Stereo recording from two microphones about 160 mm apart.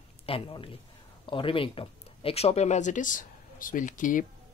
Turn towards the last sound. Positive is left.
turn(degrees=55)  # may be behind; listen again after turning